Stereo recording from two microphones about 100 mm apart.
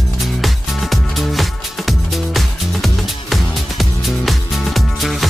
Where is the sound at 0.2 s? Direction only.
Centre (ahead or behind).